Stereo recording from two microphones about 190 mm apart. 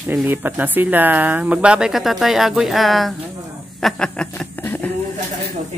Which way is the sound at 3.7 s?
5° left (ahead or behind).